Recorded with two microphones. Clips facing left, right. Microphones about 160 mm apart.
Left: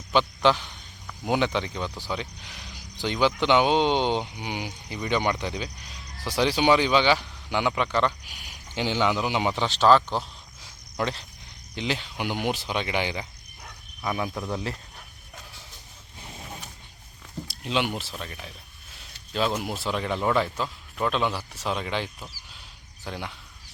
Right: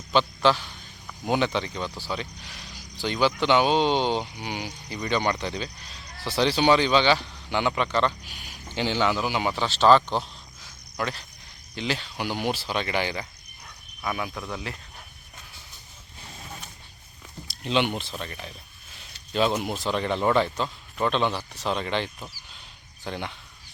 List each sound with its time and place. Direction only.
0.1 s a man's voice: 15° left (ahead or behind)
9.8 s speech: 5° left (ahead or behind)
10.6 s cricket: 25° left (ahead or behind)
11.7 s speech: 15° left (ahead or behind)
14.0 s cricket: 20° left (ahead or behind)
14.5 s speech: 35° left (ahead or behind)
17.6 s speech: 5° left (ahead or behind)